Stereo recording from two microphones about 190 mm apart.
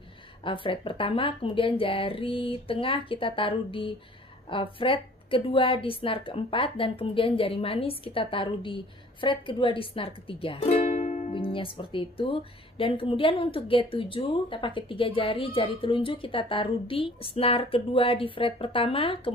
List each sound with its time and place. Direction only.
0.4 s speech: 25° left (ahead or behind)
11.3 s speech: 25° left (ahead or behind)